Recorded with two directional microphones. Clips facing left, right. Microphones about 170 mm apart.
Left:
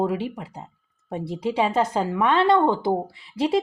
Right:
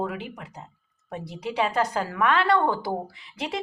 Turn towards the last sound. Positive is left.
turn(degrees=30)  # may be behind; listen again after turning